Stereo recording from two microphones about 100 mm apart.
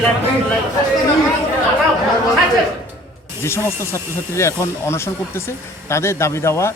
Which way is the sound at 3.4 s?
25° left (ahead or behind).